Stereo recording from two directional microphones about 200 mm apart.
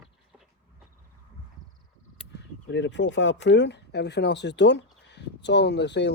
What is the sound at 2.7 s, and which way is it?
Speech, 65° left (ahead or behind).